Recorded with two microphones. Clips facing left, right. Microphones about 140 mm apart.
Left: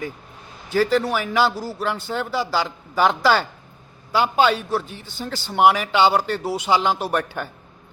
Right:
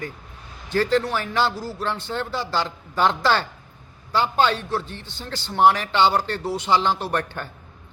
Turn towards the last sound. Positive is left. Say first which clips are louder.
# left 2 dB
turn(degrees=10)  # may be behind; listen again after turning